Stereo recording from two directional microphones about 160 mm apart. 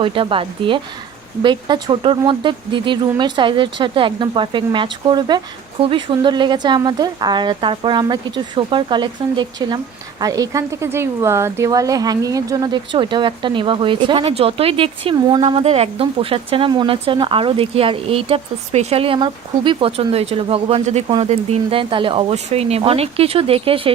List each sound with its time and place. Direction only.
0.0 s speech: 35° right (ahead or behind)